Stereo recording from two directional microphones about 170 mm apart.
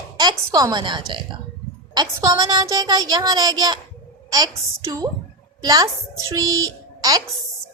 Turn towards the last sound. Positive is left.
turn(degrees=-20)  # may be behind; listen again after turning